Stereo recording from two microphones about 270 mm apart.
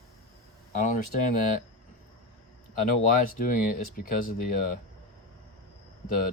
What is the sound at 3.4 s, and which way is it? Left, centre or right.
Speech, left.